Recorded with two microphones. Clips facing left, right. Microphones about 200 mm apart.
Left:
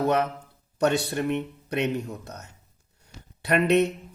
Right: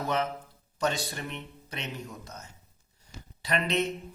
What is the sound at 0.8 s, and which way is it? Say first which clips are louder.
Speech: left 7 dB; 65° left (ahead or behind).